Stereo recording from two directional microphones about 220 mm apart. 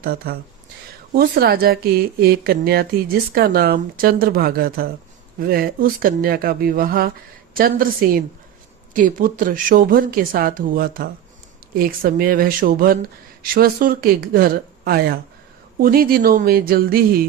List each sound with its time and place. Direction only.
0.0 s speech: 40° right (ahead or behind)